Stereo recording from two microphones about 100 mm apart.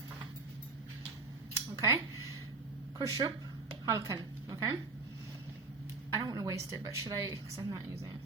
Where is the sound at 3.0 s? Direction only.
40° right (ahead or behind).